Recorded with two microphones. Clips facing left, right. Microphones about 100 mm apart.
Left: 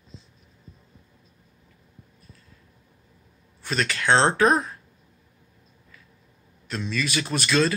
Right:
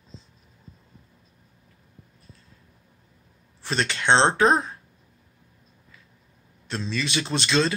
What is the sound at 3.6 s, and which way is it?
Speech, 30° right (ahead or behind).